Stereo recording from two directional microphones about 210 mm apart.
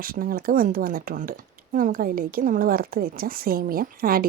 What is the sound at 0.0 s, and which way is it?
Speech, 45° right (ahead or behind).